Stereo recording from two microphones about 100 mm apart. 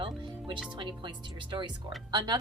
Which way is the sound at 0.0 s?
55° right (ahead or behind).